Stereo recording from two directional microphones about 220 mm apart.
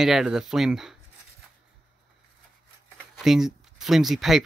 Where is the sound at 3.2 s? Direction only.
Centre (ahead or behind).